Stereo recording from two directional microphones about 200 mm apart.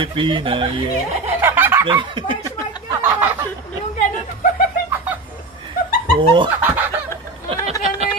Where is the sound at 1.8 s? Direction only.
25° right (ahead or behind).